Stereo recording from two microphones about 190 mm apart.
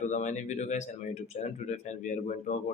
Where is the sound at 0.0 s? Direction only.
40° left (ahead or behind).